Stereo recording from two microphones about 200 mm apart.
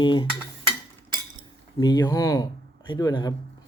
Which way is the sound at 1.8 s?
20° left (ahead or behind).